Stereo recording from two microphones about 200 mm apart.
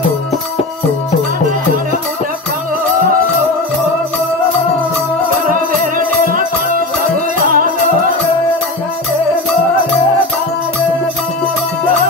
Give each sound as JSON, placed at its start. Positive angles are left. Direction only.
{"t": 7.4, "sound": "music", "side_deg": -45}